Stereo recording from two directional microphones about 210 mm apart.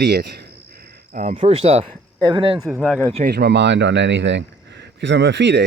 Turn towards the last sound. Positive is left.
turn(degrees=-55)  # may be behind; listen again after turning